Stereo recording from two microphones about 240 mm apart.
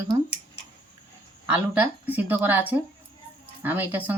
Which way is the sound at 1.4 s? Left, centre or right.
Centre.